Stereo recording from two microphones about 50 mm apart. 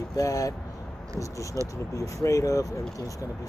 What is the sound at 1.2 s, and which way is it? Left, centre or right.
Speech, left.